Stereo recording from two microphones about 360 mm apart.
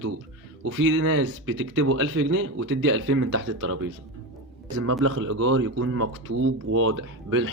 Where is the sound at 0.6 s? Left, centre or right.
Right.